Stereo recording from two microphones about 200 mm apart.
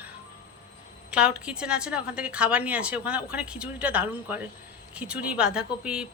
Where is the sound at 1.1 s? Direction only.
5° right (ahead or behind).